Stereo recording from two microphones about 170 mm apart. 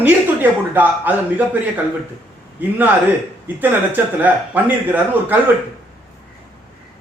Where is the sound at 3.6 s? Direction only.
10° right (ahead or behind).